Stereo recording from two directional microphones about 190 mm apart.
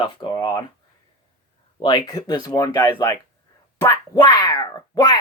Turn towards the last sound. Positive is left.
turn(degrees=20)  # may be behind; listen again after turning